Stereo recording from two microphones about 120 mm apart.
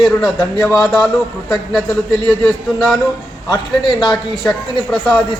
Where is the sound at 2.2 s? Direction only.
Centre (ahead or behind).